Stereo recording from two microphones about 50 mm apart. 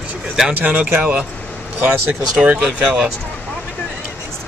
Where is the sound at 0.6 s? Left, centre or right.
Right.